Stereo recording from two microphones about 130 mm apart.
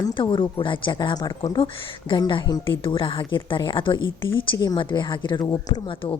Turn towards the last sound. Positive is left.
turn(degrees=35)  # may be behind; listen again after turning